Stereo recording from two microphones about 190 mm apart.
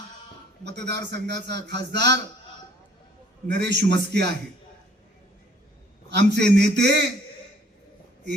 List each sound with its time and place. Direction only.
0.6 s a man's voice: 65° right (ahead or behind)
3.5 s a man's voice: 65° right (ahead or behind)
6.1 s a man's voice: 60° right (ahead or behind)